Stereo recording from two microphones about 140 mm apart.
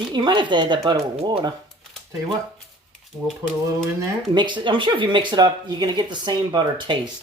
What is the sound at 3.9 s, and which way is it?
Speech, 30° right (ahead or behind).